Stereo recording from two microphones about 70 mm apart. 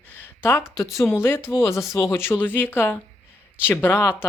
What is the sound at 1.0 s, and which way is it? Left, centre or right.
Speech, left.